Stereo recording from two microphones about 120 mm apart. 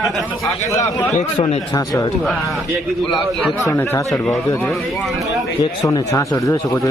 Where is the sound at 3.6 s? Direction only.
25° left (ahead or behind).